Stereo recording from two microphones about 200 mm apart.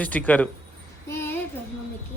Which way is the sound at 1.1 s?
10° left (ahead or behind).